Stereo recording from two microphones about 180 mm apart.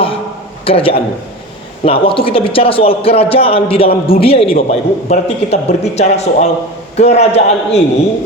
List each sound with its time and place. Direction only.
0.6 s a man's voice: 30° left (ahead or behind)